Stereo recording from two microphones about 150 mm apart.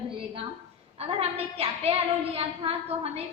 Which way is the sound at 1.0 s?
45° right (ahead or behind).